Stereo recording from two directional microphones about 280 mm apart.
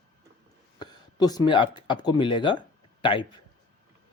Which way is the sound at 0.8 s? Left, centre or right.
Centre.